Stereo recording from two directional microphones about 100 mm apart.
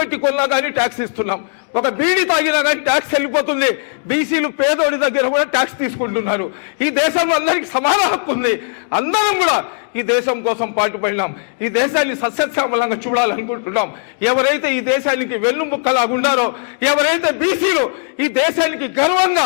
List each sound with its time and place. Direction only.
0.0 s a man's voice: 20° left (ahead or behind)